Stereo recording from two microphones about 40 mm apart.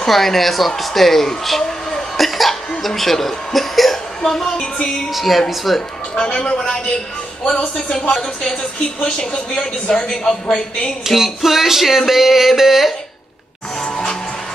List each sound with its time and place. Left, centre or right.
0.0 s speech: centre
1.6 s a sound: centre
2.1 s cough: centre
2.8 s a woman's voice: centre
5.1 s speech: centre
6.1 s speech: left
11.1 s music: centre